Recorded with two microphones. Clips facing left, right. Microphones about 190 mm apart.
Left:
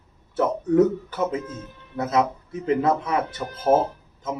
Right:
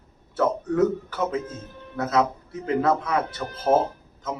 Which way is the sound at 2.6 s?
25° left (ahead or behind).